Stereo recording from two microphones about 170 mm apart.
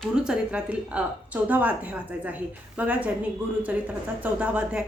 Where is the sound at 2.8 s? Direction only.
10° right (ahead or behind).